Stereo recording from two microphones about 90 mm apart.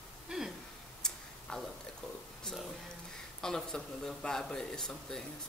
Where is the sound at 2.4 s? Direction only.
5° left (ahead or behind).